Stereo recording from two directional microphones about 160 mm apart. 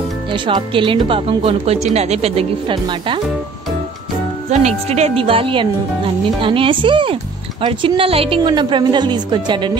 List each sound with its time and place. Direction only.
0.3 s a woman's voice: 35° right (ahead or behind)
4.5 s a woman's voice: 45° right (ahead or behind)